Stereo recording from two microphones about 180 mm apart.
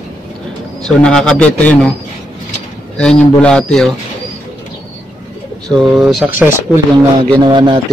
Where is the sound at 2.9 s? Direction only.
5° left (ahead or behind).